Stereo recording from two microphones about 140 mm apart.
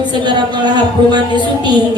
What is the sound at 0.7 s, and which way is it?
Speech, 30° right (ahead or behind).